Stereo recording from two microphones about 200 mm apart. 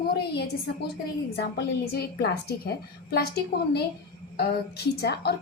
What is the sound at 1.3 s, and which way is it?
A woman's voice, 50° left (ahead or behind).